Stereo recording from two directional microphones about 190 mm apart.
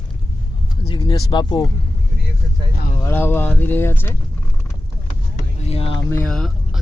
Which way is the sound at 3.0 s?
10° left (ahead or behind).